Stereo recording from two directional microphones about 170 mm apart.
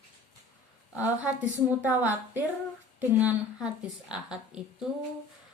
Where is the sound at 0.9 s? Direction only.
10° right (ahead or behind).